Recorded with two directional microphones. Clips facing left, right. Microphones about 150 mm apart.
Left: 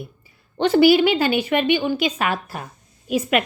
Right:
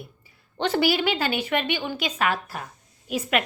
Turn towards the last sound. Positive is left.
turn(degrees=15)  # may be behind; listen again after turning